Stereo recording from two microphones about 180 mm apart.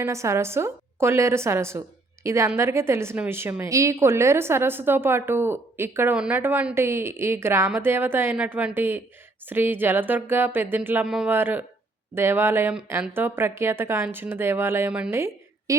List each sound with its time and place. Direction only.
0.0 s a woman's voice: 15° right (ahead or behind)